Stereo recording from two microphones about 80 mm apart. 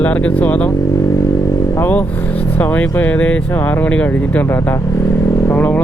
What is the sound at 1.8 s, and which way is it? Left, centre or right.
Speech, left.